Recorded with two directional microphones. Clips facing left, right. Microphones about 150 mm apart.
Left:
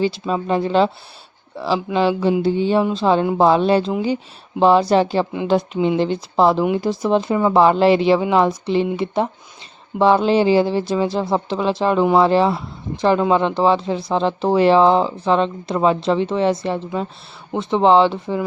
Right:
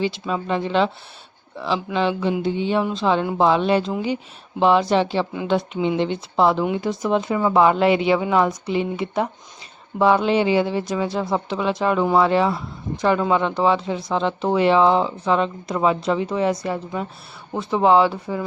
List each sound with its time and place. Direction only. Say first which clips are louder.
0.0 s speech: left 4 dB; 35° left (ahead or behind)